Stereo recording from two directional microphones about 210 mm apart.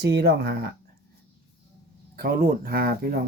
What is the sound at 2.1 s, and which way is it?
Speech, 45° right (ahead or behind).